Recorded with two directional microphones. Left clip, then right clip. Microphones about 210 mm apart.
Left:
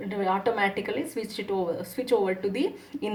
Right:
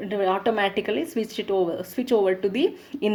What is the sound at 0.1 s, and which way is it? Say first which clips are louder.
Speech: right 3 dB; 40° right (ahead or behind).